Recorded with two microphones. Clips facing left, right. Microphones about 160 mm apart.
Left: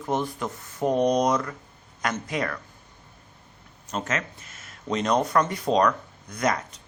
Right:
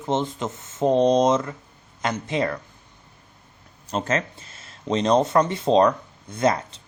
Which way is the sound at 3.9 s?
30° right (ahead or behind).